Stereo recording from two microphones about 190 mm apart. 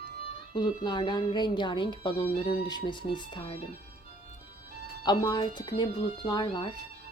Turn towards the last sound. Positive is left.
turn(degrees=25)  # may be behind; listen again after turning